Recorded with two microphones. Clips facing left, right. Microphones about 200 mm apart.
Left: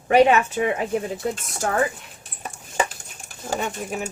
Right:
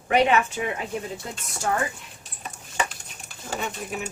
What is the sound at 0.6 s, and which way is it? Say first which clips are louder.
Speech: left 6 dB; 45° left (ahead or behind).